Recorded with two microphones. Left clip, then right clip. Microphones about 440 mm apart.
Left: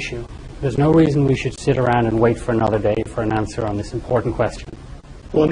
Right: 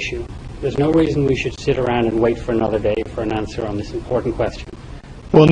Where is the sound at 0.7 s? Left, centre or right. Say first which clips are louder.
Left 1 dB; left.